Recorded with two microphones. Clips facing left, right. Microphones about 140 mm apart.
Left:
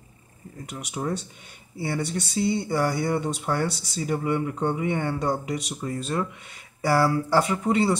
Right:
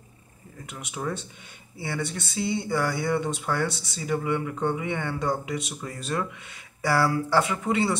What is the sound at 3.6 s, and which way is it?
Speech, 35° left (ahead or behind).